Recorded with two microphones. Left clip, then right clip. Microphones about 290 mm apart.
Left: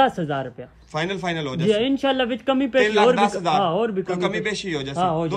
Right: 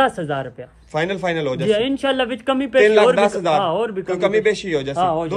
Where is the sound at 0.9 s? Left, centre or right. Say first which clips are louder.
Right 5 dB; centre.